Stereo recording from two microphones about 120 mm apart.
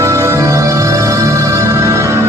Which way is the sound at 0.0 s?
25° right (ahead or behind).